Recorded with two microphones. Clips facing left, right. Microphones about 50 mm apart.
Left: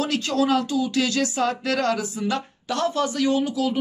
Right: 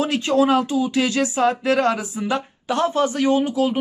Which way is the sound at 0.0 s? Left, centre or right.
Right.